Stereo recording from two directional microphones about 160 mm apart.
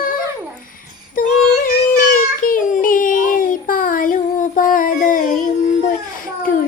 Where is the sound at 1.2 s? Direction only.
60° left (ahead or behind).